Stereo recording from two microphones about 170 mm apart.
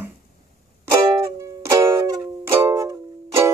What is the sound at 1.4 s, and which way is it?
Music, 20° right (ahead or behind).